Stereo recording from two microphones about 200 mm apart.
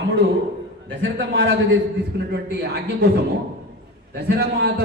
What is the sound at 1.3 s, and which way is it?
Speech, 75° right (ahead or behind).